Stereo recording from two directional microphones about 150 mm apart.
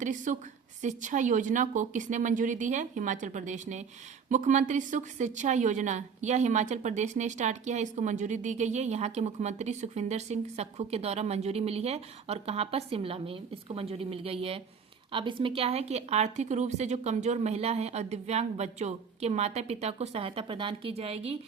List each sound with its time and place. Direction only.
0.0 s a woman's voice: 55° right (ahead or behind); by 21.3 s 40° right (ahead or behind)